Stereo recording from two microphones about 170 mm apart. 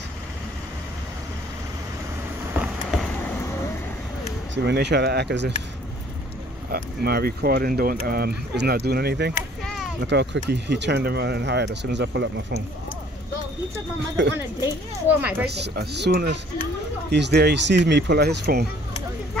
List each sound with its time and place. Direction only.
2.5 s a sound: 5° right (ahead or behind)
3.1 s a sound: 10° left (ahead or behind)
4.6 s speech: 80° right
6.7 s speech: 70° right (ahead or behind)
10.0 s speech: 85° right
14.2 s speech: 90° right
15.4 s speech: 75° right (ahead or behind)